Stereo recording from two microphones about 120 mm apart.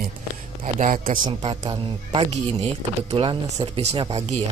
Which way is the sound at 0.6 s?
90° right.